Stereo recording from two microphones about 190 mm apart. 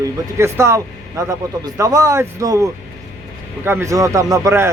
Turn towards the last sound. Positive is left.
turn(degrees=-15)  # may be behind; listen again after turning